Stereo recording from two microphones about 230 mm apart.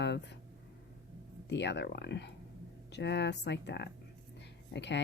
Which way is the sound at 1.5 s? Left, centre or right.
Left.